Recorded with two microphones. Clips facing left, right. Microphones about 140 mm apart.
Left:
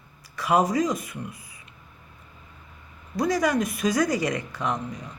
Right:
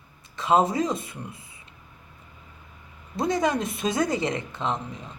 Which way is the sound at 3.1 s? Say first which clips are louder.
Left 1 dB; 25° right (ahead or behind).